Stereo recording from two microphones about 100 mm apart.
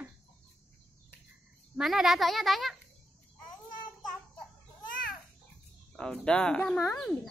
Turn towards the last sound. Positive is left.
turn(degrees=5)  # may be behind; listen again after turning